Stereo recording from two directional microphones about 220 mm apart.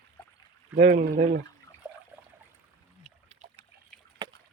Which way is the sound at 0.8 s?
45° right (ahead or behind).